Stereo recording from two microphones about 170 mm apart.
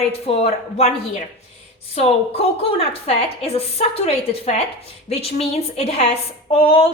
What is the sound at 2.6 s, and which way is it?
Speech, 35° left (ahead or behind).